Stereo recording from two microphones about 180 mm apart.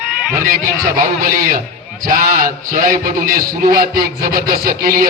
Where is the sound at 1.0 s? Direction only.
50° right (ahead or behind).